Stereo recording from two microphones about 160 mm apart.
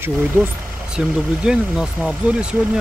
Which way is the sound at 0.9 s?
5° right (ahead or behind).